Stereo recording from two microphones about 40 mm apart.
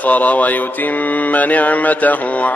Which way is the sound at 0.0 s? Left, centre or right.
Left.